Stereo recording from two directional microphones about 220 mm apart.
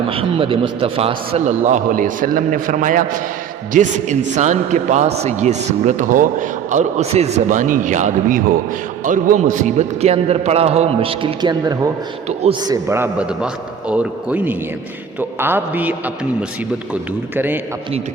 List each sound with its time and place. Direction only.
0.1 s a man's voice: 25° right (ahead or behind); by 17.6 s 10° right (ahead or behind)